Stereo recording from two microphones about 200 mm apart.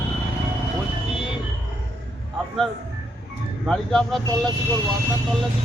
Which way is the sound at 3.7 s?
5° left (ahead or behind).